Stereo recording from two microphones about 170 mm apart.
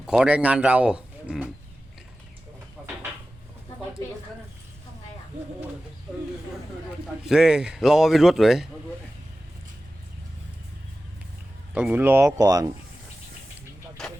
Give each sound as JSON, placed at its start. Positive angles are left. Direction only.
{"t": 0.1, "sound": "a man's voice", "side_deg": -5}
{"t": 2.8, "sound": "a sound", "side_deg": 0}
{"t": 7.3, "sound": "a man's voice", "side_deg": -5}
{"t": 11.7, "sound": "speech", "side_deg": -10}
{"t": 12.4, "sound": "speech", "side_deg": -20}
{"t": 14.0, "sound": "vehicle", "side_deg": 5}